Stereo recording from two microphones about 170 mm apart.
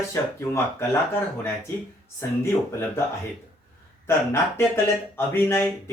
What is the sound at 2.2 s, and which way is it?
Speech, 15° left (ahead or behind).